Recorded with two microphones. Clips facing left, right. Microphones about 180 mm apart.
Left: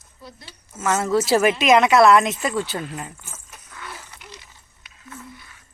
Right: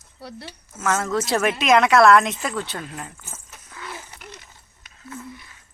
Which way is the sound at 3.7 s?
25° right (ahead or behind).